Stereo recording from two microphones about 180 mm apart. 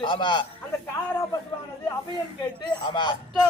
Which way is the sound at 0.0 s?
25° left (ahead or behind).